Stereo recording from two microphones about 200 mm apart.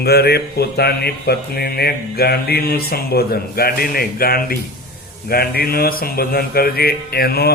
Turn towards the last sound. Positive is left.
turn(degrees=50)  # may be behind; listen again after turning